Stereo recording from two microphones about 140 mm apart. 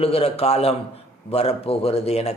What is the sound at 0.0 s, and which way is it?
Speech, 45° left (ahead or behind).